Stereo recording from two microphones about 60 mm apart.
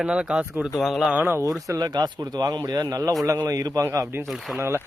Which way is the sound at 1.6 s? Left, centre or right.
Right.